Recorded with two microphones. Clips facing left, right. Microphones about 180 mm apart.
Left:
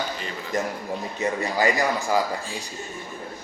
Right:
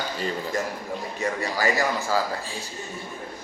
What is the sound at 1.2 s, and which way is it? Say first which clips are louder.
Speech: left 3 dB; 20° left (ahead or behind).